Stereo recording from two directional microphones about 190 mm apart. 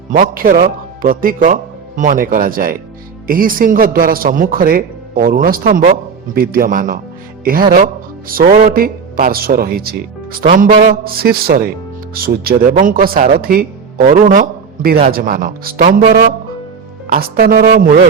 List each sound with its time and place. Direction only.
0.1 s a man's voice: 45° right (ahead or behind)